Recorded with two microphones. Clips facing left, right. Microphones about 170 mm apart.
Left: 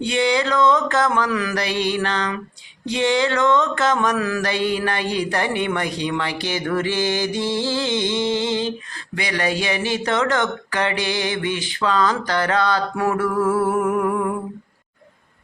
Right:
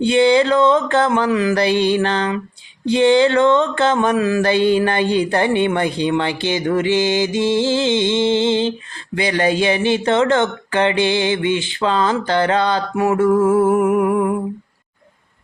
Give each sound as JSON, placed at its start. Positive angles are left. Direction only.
{"t": 0.0, "sound": "mantra", "side_deg": -30}